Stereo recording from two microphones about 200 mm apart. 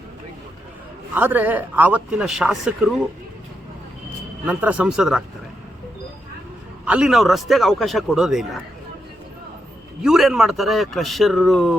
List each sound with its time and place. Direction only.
1.1 s speech: 10° right (ahead or behind)
4.4 s speech: 5° right (ahead or behind)
6.8 s speech: 5° right (ahead or behind)
10.0 s speech: centre (ahead or behind)